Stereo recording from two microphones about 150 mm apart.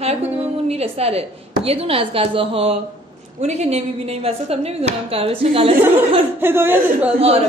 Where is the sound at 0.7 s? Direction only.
45° right (ahead or behind).